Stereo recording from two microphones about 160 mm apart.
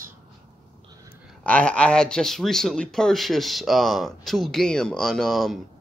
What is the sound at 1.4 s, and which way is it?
Speech, 5° left (ahead or behind).